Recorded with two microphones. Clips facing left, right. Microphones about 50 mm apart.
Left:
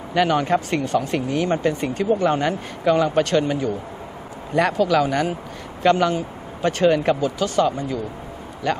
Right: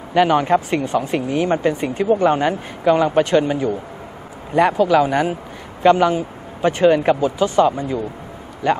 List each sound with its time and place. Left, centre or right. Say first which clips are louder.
0.1 s speech: right 4 dB; centre